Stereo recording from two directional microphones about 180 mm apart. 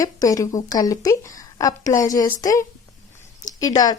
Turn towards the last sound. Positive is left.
turn(degrees=20)  # may be behind; listen again after turning